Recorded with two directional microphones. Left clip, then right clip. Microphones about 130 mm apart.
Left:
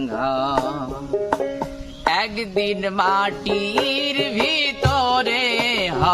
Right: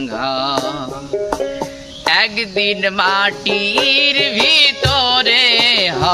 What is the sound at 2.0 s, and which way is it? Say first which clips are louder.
Music: right 6 dB; 25° left (ahead or behind).